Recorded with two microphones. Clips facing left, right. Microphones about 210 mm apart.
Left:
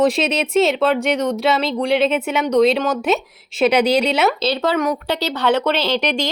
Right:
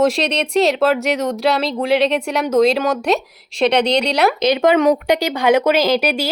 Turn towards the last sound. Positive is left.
turn(degrees=-5)  # may be behind; listen again after turning